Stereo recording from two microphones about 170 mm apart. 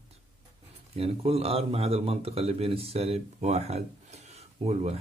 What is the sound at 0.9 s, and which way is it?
Speech, 35° right (ahead or behind).